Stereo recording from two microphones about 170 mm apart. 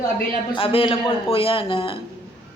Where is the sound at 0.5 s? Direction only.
35° left (ahead or behind).